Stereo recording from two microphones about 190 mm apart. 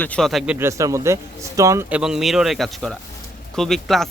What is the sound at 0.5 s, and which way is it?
Speech, 15° right (ahead or behind).